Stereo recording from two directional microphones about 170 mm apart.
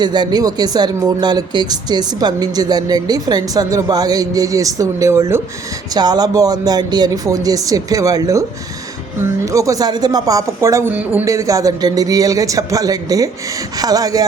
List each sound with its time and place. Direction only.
0.0 s speech: 25° right (ahead or behind)
9.5 s speech: 20° right (ahead or behind)